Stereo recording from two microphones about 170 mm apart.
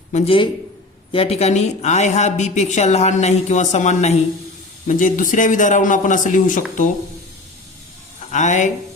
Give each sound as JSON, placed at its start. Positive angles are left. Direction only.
{"t": 0.1, "sound": "a man's voice", "side_deg": 45}
{"t": 8.3, "sound": "speech", "side_deg": 45}